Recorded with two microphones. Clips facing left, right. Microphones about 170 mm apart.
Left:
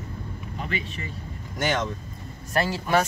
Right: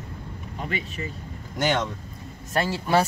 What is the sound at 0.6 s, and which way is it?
Speech, 40° right (ahead or behind).